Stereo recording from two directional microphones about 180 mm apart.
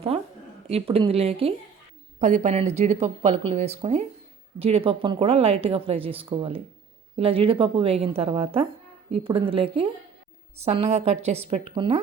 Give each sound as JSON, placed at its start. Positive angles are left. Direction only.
{"t": 0.1, "sound": "a woman's voice", "side_deg": -35}